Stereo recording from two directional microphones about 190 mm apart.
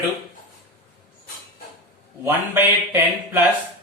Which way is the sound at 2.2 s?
10° right (ahead or behind).